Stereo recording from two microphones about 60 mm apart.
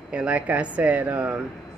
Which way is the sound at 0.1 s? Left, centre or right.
Right.